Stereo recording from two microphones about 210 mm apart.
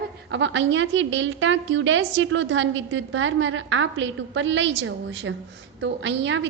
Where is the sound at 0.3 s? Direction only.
60° right (ahead or behind).